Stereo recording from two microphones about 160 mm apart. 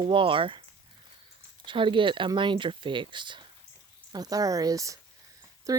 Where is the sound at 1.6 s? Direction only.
30° right (ahead or behind).